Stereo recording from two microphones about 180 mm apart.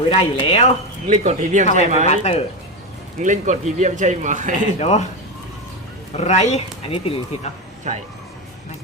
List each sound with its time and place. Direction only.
0.0 s speech: 30° left (ahead or behind)
1.1 s speech: 40° right (ahead or behind)
2.0 s speech: 35° left (ahead or behind)
3.2 s speech: 40° right (ahead or behind)
4.8 s speech: 40° left (ahead or behind)
6.1 s speech: 40° left (ahead or behind)
7.9 s speech: 40° right (ahead or behind)